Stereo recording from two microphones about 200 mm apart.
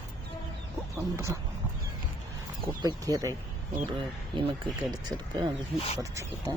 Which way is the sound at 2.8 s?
20° right (ahead or behind).